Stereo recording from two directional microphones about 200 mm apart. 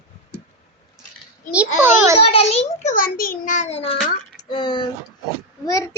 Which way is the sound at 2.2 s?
30° left (ahead or behind).